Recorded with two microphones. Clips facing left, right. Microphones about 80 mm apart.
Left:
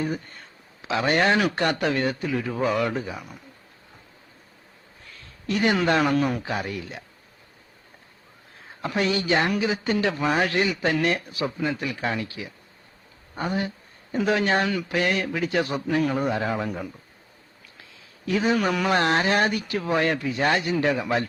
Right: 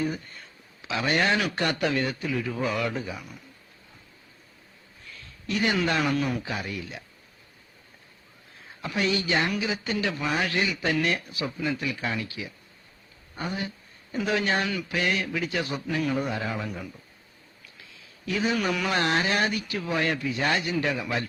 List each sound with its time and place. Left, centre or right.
0.8 s a man's voice: left
5.5 s speech: left
8.8 s a man's voice: left
18.3 s a man's voice: left